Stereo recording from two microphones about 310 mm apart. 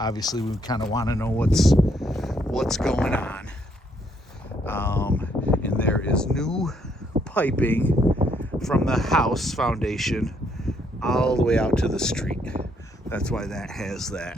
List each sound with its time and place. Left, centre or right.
0.0 s speech: centre
4.6 s a sound: centre
7.3 s speech: centre